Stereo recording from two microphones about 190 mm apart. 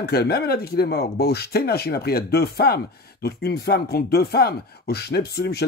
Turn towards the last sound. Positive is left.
turn(degrees=60)  # may be behind; listen again after turning